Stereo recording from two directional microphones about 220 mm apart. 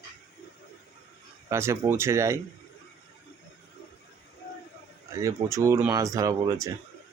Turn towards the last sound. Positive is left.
turn(degrees=-15)  # may be behind; listen again after turning